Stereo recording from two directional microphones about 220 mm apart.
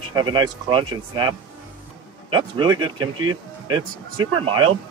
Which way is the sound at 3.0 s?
75° right (ahead or behind).